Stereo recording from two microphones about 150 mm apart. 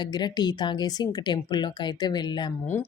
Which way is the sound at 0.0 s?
30° left (ahead or behind).